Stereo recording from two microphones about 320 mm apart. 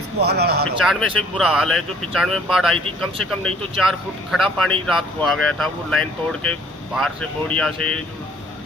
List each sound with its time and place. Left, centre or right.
0.2 s speech: right
0.9 s speech: centre